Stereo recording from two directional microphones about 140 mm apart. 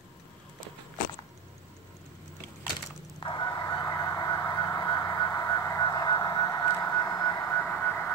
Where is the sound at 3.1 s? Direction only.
35° left (ahead or behind).